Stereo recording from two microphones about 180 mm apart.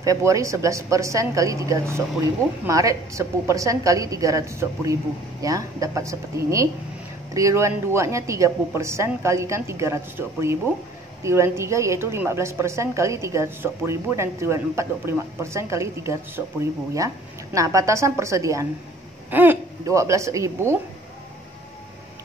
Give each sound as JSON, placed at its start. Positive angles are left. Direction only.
{"t": 0.0, "sound": "speech", "side_deg": -15}
{"t": 17.6, "sound": "speech", "side_deg": -15}